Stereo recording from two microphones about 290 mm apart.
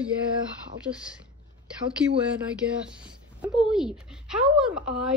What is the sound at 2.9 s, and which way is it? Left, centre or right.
A woman's voice, centre.